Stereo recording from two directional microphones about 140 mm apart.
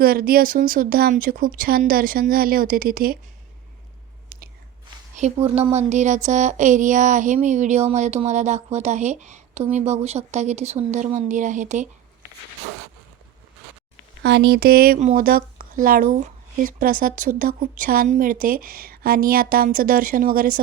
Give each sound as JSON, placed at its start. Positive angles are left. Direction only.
{"t": 0.0, "sound": "speech", "side_deg": -90}
{"t": 4.3, "sound": "chewing", "side_deg": -90}
{"t": 5.1, "sound": "speech", "side_deg": -55}
{"t": 14.6, "sound": "speech", "side_deg": -90}